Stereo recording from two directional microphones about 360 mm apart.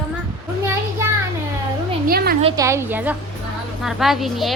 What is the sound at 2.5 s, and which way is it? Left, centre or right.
A woman's voice, centre.